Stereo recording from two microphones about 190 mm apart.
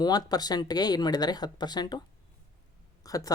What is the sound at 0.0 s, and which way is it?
Speech, 20° left (ahead or behind).